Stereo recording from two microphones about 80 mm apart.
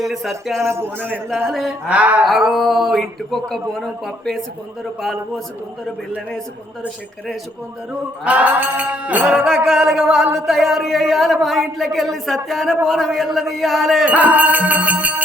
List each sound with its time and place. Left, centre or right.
0.0 s a man's voice: centre
0.6 s speech: right
0.9 s music: right
1.5 s a man's voice: centre
1.9 s mantra: centre
2.2 s a man's voice: centre
8.2 s mantra: centre
9.6 s mantra: centre
10.3 s a man's voice: centre
14.0 s music: centre